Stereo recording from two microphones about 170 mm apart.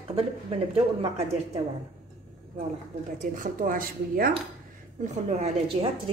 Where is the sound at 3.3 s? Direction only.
55° right (ahead or behind).